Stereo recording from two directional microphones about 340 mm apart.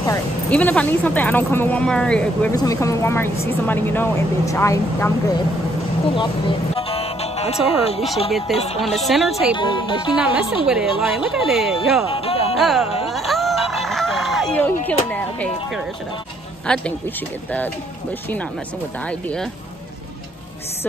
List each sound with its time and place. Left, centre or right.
0.0 s speech: centre
6.7 s music: centre
8.3 s speech: centre
9.6 s speech: centre
10.1 s speech: centre
12.1 s music: centre
12.5 s speech: centre
13.1 s music: centre
16.6 s speech: centre
19.0 s speech: centre